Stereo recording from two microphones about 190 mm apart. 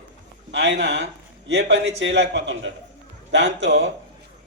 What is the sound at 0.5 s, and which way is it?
A man's voice, 70° right (ahead or behind).